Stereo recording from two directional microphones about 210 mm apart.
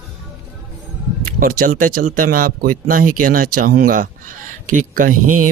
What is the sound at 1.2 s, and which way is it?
Mantra, 45° right (ahead or behind).